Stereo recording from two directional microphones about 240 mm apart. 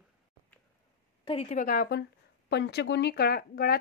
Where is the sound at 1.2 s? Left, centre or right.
Left.